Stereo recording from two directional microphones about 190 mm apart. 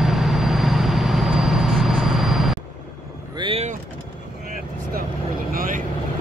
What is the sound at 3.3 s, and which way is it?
Vehicle, 30° right (ahead or behind).